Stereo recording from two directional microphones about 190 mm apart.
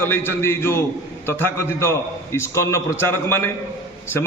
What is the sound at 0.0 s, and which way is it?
A man's voice, 10° left (ahead or behind).